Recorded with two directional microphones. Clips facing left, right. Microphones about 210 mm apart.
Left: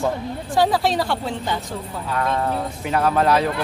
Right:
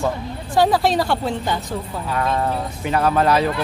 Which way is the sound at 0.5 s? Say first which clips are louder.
Right 2 dB; 50° right (ahead or behind).